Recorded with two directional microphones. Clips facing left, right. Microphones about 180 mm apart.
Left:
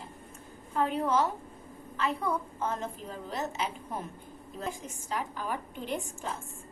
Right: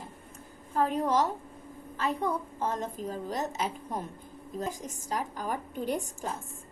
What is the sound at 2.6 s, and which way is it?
A woman's voice, 35° right (ahead or behind).